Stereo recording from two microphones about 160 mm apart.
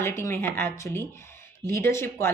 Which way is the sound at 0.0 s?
15° left (ahead or behind).